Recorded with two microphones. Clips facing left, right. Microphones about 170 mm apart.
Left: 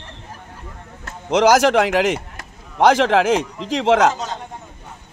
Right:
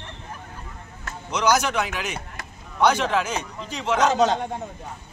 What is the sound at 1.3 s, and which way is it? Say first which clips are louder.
Speech: left 8 dB; 90° left.